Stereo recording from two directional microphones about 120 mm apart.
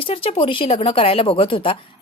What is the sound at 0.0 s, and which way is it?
Speech, 50° left (ahead or behind).